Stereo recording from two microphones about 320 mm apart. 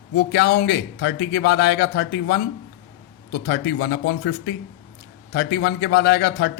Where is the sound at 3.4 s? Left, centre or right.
Left.